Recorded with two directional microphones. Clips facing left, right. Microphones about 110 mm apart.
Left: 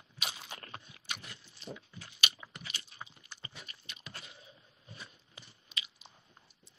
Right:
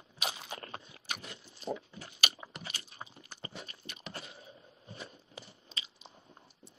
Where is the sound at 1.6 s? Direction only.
35° right (ahead or behind).